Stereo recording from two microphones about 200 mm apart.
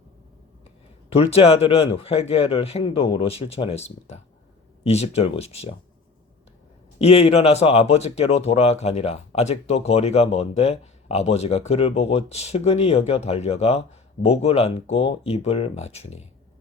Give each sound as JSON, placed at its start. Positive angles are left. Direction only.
{"t": 1.1, "sound": "a man's voice", "side_deg": 30}
{"t": 7.0, "sound": "speech", "side_deg": 30}